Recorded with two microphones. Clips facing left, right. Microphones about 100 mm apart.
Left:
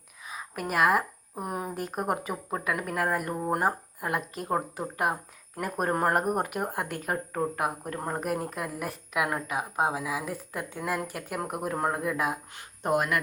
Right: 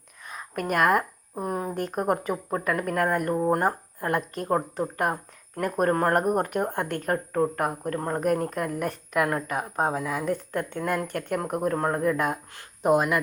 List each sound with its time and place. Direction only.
0.3 s a sound: 5° left (ahead or behind)
1.4 s speech: 15° left (ahead or behind)
1.7 s speech: 5° left (ahead or behind)
12.9 s speech: 25° right (ahead or behind)